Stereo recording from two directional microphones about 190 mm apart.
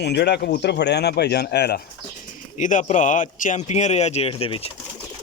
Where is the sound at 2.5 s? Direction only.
40° left (ahead or behind).